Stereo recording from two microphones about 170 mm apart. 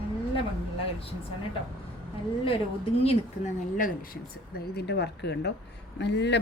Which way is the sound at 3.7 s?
55° left (ahead or behind).